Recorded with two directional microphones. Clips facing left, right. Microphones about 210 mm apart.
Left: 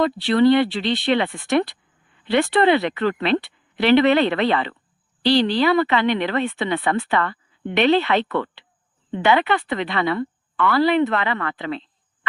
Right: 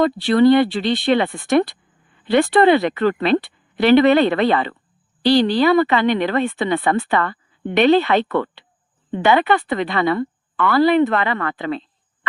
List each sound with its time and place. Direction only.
0.0 s speech: 45° right (ahead or behind)